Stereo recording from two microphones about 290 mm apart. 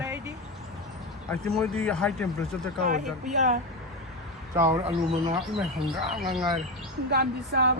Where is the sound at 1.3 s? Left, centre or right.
Centre.